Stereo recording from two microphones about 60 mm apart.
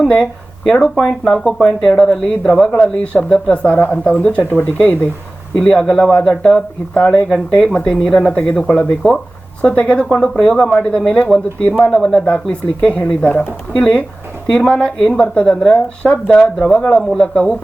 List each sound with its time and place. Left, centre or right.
0.0 s speech: left
0.6 s speech: centre
3.0 s speech: left
3.9 s speech: centre
5.5 s speech: centre
11.8 s speech: centre
12.0 s speech: centre
13.7 s speech: centre